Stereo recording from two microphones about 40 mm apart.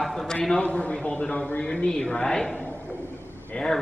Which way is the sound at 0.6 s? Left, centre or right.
Left.